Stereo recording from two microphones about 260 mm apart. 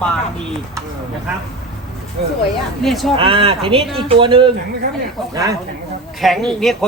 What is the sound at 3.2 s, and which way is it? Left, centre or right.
Speech, right.